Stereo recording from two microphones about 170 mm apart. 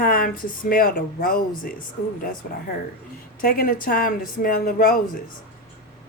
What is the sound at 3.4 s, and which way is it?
Speech, 60° left (ahead or behind).